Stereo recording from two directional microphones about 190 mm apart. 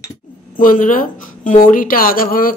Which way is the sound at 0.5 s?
45° left (ahead or behind).